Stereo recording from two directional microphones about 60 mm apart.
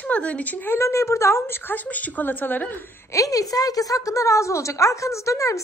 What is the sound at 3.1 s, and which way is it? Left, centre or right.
A woman's voice, left.